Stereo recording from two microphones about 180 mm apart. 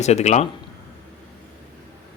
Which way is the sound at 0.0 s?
40° left (ahead or behind).